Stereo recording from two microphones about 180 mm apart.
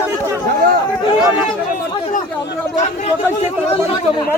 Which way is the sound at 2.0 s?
45° left (ahead or behind).